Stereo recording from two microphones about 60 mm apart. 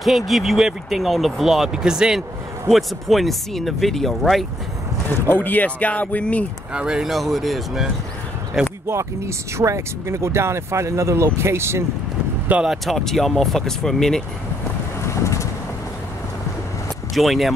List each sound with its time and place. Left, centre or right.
0.3 s speech: centre
5.2 s speech: left
6.7 s speech: centre
8.8 s speech: right
12.6 s speech: centre
15.0 s boat: left
17.1 s speech: centre